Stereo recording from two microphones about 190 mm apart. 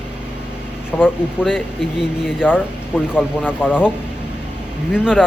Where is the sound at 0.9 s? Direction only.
Centre (ahead or behind).